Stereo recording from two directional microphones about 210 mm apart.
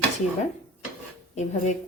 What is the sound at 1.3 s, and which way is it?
Speech, 35° left (ahead or behind).